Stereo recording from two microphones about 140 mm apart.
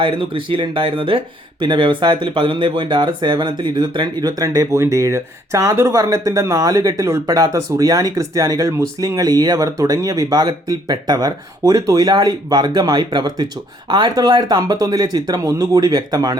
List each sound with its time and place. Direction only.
0.0 s speech: 40° right (ahead or behind)